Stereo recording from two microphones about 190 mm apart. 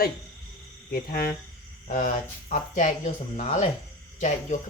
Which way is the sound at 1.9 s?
40° left (ahead or behind).